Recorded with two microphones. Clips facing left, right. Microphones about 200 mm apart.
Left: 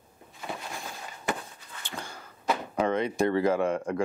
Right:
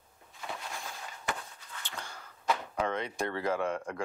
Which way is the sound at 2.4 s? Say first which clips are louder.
Left 3 dB; 10° left (ahead or behind).